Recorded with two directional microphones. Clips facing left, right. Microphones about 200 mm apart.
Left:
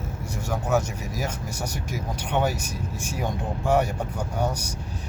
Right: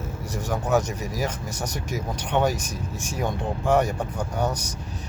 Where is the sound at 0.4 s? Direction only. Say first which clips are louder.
Right 1 dB; 10° left (ahead or behind).